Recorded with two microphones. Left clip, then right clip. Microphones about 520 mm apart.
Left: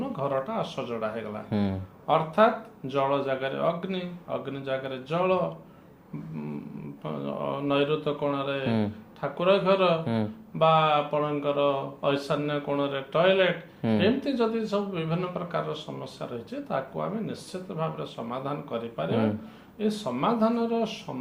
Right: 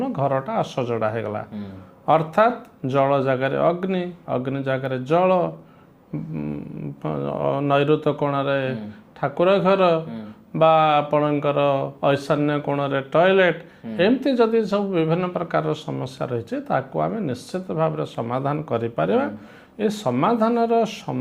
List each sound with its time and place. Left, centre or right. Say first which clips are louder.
0.0 s speech: right 6 dB; right
7.0 s speech: right 8 dB; right